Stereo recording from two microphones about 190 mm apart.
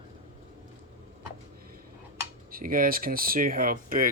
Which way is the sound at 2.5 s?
50° right (ahead or behind).